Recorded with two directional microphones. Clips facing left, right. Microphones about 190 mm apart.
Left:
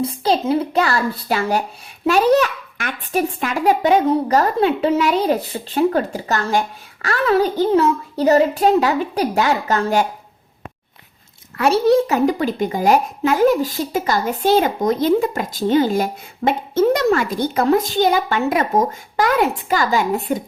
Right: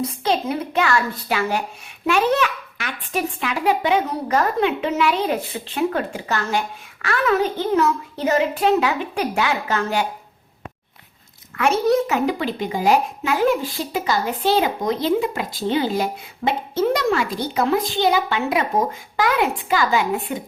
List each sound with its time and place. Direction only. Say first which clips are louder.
0.0 s a child's voice: left 3 dB; 30° left (ahead or behind)
11.5 s speech: left 3 dB; 35° left (ahead or behind)